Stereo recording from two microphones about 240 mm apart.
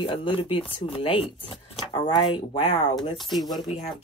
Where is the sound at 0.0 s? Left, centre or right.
Left.